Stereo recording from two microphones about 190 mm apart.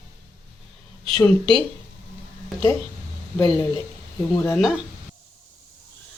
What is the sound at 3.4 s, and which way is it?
Speech, 20° left (ahead or behind).